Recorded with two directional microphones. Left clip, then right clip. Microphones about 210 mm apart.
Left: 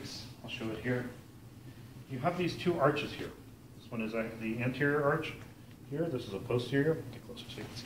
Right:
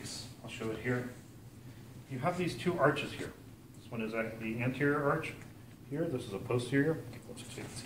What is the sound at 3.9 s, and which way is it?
Speech, 5° right (ahead or behind).